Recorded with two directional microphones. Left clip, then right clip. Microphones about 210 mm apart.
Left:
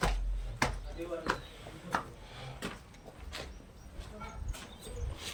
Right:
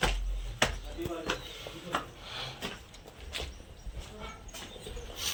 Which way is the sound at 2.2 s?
5° left (ahead or behind).